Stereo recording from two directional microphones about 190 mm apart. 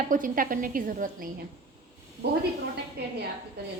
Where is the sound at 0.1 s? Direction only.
45° right (ahead or behind).